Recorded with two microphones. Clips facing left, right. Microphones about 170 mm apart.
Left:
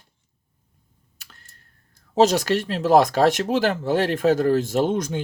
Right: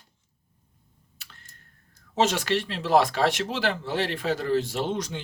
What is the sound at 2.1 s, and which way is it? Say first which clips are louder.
Speech: left 6 dB; 40° left (ahead or behind).